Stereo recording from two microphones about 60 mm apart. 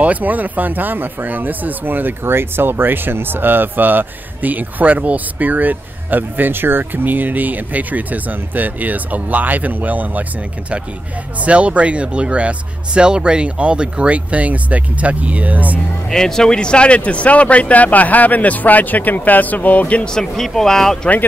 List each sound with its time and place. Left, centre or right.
0.0 s speech: right
11.4 s speech: right
16.1 s speech: centre; by 20.1 s left
20.1 s speech: centre